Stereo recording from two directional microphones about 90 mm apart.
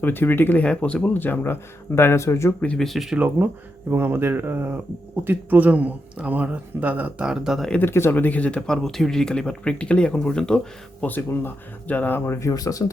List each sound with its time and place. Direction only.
0.0 s speech: 20° left (ahead or behind)
2.6 s speech: 15° left (ahead or behind)
2.8 s speech: centre (ahead or behind)
3.2 s speech: 25° right (ahead or behind)
7.3 s speech: 5° right (ahead or behind)
7.8 s speech: 25° left (ahead or behind); by 10.6 s 10° left (ahead or behind)
11.0 s speech: 20° left (ahead or behind); by 12.9 s 40° left (ahead or behind)